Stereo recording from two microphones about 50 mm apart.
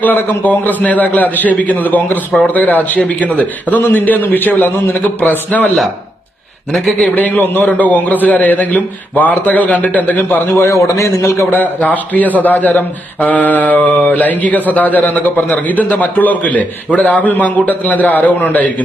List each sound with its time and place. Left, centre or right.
0.0 s a man's voice: left
6.7 s a man's voice: centre
7.2 s a man's voice: left
10.7 s a man's voice: left
11.5 s a man's voice: left